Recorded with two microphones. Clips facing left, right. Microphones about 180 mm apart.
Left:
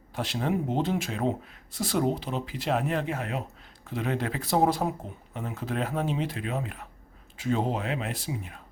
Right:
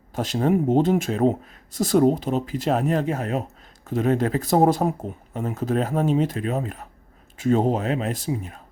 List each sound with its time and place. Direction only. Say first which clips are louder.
0.1 s speech: right 7 dB; 45° right (ahead or behind)